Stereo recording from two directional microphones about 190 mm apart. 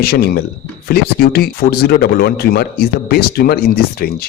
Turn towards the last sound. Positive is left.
turn(degrees=55)  # may be behind; listen again after turning